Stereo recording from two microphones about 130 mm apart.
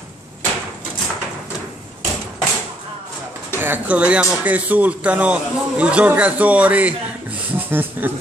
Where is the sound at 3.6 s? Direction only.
15° right (ahead or behind).